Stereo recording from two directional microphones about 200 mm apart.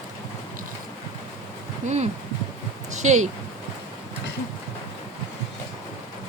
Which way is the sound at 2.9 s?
35° right (ahead or behind).